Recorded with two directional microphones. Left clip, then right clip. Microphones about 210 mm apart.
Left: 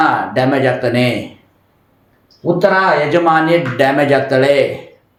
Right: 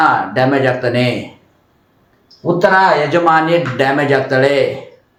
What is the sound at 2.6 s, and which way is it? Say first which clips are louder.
Speech: right 2 dB; 15° left (ahead or behind).